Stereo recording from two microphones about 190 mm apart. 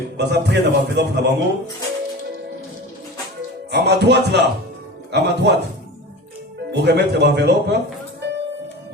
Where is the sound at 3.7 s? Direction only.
60° right (ahead or behind).